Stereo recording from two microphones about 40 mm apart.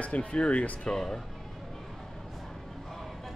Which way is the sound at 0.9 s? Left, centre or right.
Centre.